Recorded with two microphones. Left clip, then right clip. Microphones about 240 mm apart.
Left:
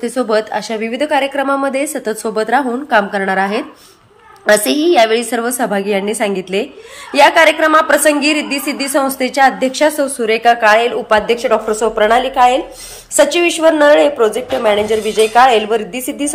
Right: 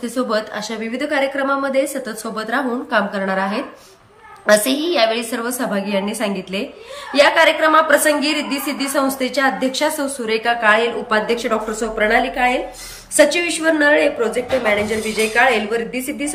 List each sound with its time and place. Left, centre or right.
0.0 s a woman's voice: centre